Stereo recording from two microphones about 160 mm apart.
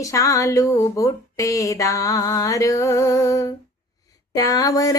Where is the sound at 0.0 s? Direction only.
20° left (ahead or behind).